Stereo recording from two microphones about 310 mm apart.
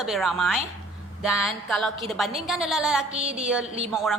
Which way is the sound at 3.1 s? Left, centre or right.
Right.